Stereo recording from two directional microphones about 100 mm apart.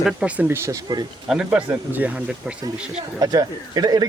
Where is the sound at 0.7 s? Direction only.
45° right (ahead or behind).